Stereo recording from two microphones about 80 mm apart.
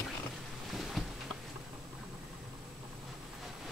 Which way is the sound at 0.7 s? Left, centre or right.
Centre.